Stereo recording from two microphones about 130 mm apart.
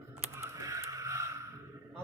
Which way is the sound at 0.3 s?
20° right (ahead or behind).